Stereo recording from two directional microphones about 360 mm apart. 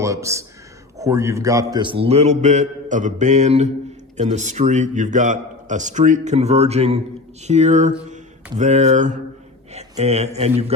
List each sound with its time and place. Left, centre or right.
0.0 s a man's voice: centre